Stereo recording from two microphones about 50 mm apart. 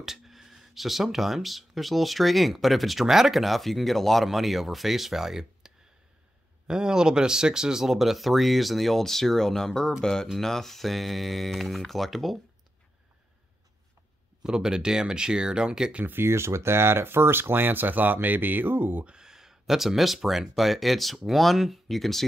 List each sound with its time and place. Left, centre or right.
0.0 s speech: centre
6.7 s speech: centre
14.4 s speech: centre
16.1 s speech: right
19.0 s speech: centre